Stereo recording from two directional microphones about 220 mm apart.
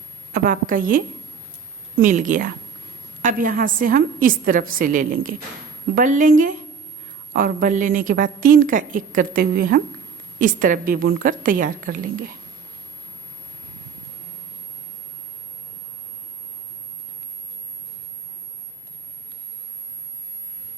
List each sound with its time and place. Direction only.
0.3 s a woman's voice: 40° right (ahead or behind)